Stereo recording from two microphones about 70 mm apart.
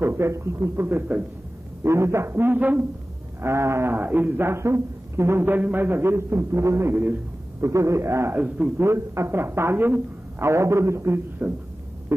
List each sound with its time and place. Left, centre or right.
0.0 s a man's voice: right
1.8 s a man's voice: right
3.4 s a man's voice: right
3.9 s a man's voice: right
8.4 s a man's voice: right
8.7 s a man's voice: right
11.4 s a man's voice: centre
12.1 s a man's voice: right